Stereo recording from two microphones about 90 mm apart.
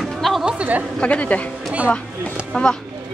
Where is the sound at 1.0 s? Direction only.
15° left (ahead or behind).